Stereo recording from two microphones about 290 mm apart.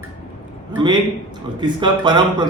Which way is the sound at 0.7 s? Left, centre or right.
Centre.